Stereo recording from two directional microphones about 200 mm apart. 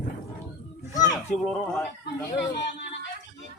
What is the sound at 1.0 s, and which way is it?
Children playing, 20° left (ahead or behind).